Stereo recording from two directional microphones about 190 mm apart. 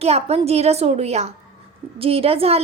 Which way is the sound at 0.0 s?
35° right (ahead or behind).